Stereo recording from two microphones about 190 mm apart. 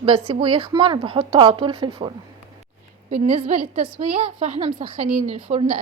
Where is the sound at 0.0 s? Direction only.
30° right (ahead or behind).